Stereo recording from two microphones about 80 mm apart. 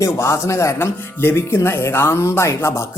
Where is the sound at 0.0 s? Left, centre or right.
Left.